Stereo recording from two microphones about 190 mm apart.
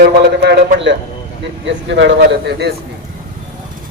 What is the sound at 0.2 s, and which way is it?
A man's voice, 60° right (ahead or behind).